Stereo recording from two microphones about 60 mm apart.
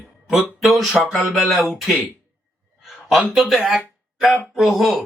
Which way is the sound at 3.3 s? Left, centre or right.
Centre.